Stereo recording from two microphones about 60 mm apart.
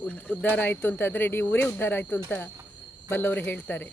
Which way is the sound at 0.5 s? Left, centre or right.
Left.